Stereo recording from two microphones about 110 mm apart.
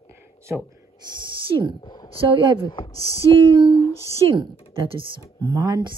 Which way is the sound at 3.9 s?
30° left (ahead or behind).